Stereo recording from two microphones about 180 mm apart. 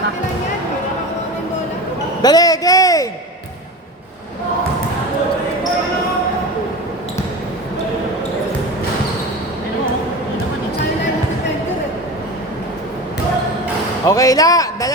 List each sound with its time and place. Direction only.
2.2 s a man's voice: 20° left (ahead or behind)
14.0 s speech: 20° left (ahead or behind)